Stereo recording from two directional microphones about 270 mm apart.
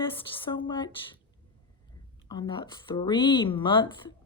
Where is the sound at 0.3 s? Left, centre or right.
Centre.